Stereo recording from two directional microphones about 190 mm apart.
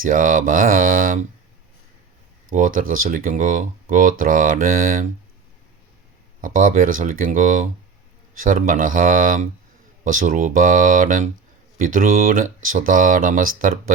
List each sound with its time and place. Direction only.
0.0 s speech: 45° right (ahead or behind)
2.5 s speech: 45° right (ahead or behind)
6.4 s speech: 45° right (ahead or behind)